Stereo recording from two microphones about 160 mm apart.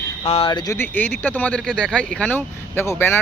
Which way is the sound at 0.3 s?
35° left (ahead or behind).